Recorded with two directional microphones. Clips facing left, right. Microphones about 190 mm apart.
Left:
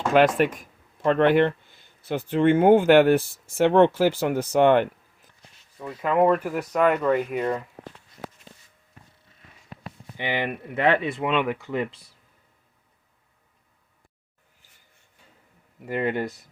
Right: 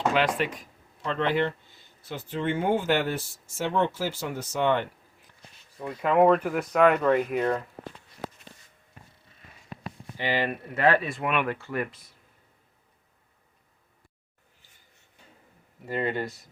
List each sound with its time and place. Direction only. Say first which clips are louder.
0.1 s speech: left 7 dB; 50° left (ahead or behind)
5.8 s speech: even; centre (ahead or behind)
10.2 s speech: even; 20° left (ahead or behind)
15.9 s speech: left 3 dB; 15° left (ahead or behind)